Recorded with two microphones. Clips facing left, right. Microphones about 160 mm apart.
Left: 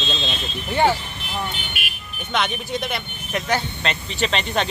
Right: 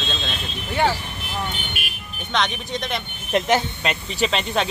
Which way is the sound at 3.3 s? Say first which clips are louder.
Right 4 dB; 25° right (ahead or behind).